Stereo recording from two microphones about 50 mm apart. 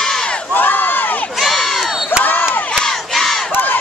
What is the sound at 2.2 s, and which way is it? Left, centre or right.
Crowd, left.